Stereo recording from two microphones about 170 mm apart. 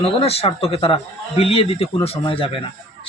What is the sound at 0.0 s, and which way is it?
Speech, 35° left (ahead or behind).